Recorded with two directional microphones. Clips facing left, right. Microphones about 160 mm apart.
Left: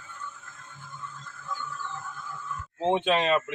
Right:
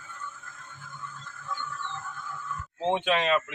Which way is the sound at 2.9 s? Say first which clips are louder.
Left 2 dB; 30° left (ahead or behind).